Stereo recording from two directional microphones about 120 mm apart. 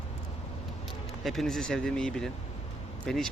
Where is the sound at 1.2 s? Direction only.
Centre (ahead or behind).